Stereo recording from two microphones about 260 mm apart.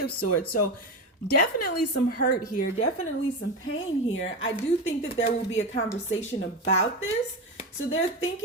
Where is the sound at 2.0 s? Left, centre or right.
Left.